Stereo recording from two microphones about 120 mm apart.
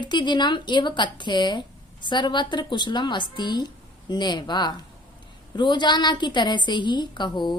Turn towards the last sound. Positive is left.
turn(degrees=40)  # may be behind; listen again after turning